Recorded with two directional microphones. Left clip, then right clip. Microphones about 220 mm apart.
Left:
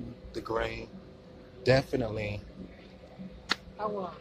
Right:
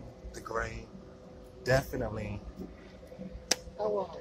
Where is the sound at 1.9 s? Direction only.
25° left (ahead or behind).